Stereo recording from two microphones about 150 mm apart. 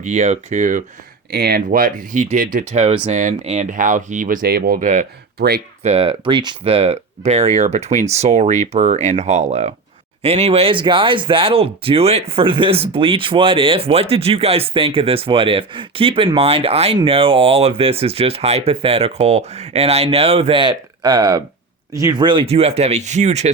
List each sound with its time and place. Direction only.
0.0 s speech: 50° right (ahead or behind)
1.3 s speech: 90° right; by 2.6 s 65° right (ahead or behind)
2.7 s speech: 45° right (ahead or behind); by 5.6 s 85° right
5.8 s speech: 40° right (ahead or behind)